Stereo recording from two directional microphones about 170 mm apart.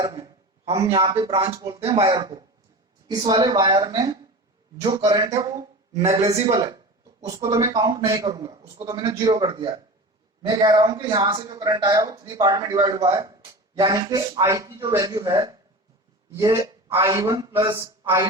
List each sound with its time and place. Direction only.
0.0 s a sound: 25° right (ahead or behind)
1.1 s speech: 35° right (ahead or behind)
1.8 s speech: 35° right (ahead or behind)
2.0 s speech: 25° right (ahead or behind)
6.0 s speech: 40° right (ahead or behind)
7.3 s speech: 20° right (ahead or behind)